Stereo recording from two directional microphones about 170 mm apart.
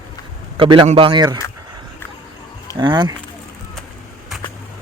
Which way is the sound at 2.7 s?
25° right (ahead or behind).